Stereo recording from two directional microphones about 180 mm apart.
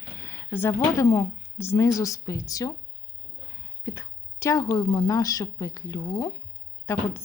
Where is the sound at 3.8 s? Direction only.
20° left (ahead or behind).